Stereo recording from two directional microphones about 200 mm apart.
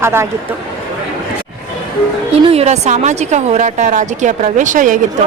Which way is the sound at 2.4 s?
30° right (ahead or behind).